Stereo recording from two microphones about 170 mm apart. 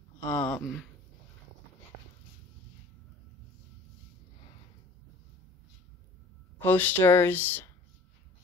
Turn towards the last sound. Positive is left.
turn(degrees=10)  # may be behind; listen again after turning